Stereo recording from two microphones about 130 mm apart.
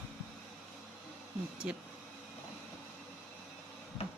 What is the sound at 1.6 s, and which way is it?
Speech, 5° right (ahead or behind).